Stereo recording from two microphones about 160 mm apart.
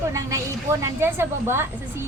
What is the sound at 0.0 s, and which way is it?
A woman's voice, 20° right (ahead or behind).